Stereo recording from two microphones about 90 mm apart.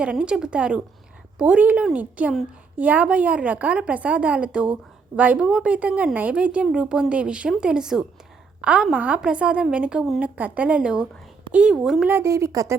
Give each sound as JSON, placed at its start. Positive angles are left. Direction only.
{"t": 0.0, "sound": "a woman's voice", "side_deg": -10}
{"t": 12.0, "sound": "speech", "side_deg": -30}